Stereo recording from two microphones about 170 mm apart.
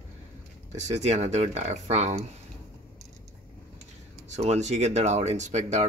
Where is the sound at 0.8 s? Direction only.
40° right (ahead or behind).